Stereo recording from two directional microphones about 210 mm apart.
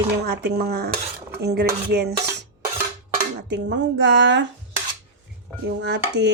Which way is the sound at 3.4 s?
55° right (ahead or behind).